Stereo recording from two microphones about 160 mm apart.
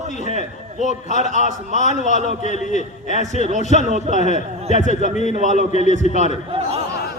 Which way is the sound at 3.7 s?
50° right (ahead or behind).